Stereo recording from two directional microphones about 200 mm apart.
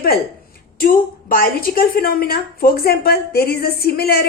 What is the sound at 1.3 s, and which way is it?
A woman's voice, 45° left (ahead or behind).